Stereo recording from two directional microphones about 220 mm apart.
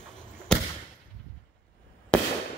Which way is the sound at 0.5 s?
5° left (ahead or behind).